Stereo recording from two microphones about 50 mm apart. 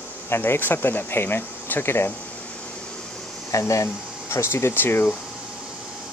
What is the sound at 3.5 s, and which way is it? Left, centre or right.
Speech, left.